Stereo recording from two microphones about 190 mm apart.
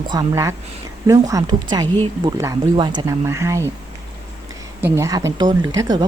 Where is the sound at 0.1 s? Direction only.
15° right (ahead or behind).